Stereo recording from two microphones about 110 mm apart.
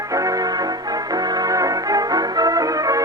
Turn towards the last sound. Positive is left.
turn(degrees=-30)  # may be behind; listen again after turning